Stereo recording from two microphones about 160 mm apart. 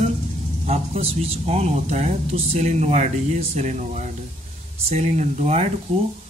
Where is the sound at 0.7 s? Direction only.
40° right (ahead or behind).